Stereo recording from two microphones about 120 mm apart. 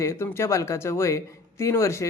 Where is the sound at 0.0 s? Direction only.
20° left (ahead or behind).